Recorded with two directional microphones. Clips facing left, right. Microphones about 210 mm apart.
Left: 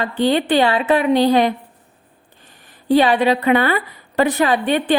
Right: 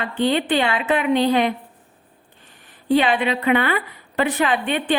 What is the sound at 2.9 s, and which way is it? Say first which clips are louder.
A woman's voice: left 4 dB; 40° left (ahead or behind).